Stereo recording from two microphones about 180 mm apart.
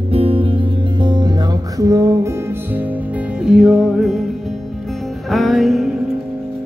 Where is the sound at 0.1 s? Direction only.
30° right (ahead or behind); by 4.2 s centre (ahead or behind).